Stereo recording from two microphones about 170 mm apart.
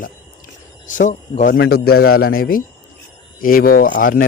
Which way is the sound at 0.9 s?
45° left (ahead or behind).